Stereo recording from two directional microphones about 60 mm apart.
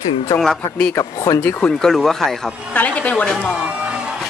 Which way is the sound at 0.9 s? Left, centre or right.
Left.